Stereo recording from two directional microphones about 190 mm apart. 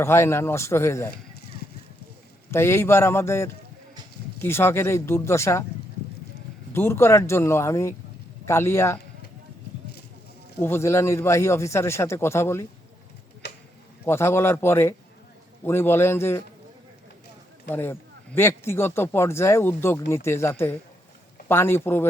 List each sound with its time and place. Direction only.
0.0 s speech: 15° left (ahead or behind)
2.5 s speech: 15° left (ahead or behind)
6.7 s speech: 10° left (ahead or behind)
10.6 s speech: 15° left (ahead or behind)
13.4 s a sound: 60° left (ahead or behind)
14.0 s speech: 15° left (ahead or behind)
17.7 s speech: 10° left (ahead or behind)